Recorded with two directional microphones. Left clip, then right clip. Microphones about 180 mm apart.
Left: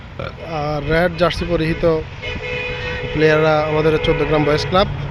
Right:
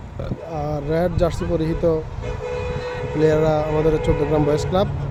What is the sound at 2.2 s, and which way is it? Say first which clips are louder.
Vehicle: left 3 dB; 55° right (ahead or behind).